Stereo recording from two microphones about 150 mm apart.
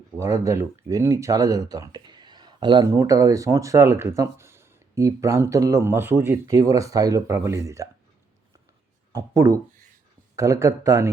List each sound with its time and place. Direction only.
0.2 s speech: 20° right (ahead or behind)
9.1 s speech: 20° right (ahead or behind)